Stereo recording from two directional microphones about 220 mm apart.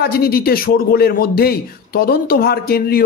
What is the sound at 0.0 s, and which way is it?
Speech, 45° left (ahead or behind).